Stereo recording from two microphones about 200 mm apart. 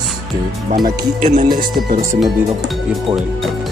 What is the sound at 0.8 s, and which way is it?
Speech, 40° right (ahead or behind).